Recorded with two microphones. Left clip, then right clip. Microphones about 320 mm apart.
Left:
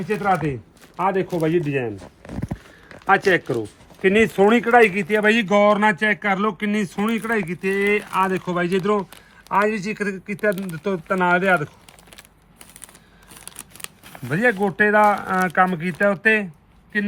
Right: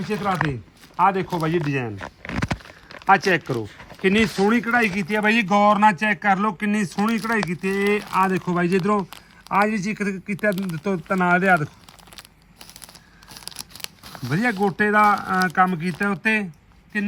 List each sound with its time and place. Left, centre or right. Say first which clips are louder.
0.2 s speech: left 2 dB; centre
3.1 s speech: even; centre
13.3 s a sound: right 5 dB; right
14.3 s speech: left 3 dB; centre